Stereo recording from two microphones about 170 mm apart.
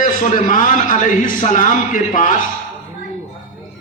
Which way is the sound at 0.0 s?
50° left (ahead or behind).